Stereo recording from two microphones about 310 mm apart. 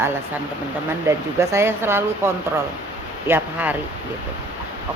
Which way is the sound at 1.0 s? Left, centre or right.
Centre.